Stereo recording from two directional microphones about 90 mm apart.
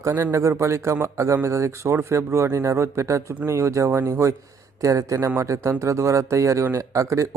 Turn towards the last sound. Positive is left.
turn(degrees=-35)  # may be behind; listen again after turning